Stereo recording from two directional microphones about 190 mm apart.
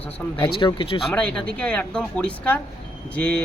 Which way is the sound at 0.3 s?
25° left (ahead or behind).